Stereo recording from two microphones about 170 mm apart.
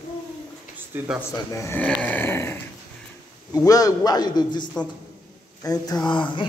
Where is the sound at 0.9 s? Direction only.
10° right (ahead or behind).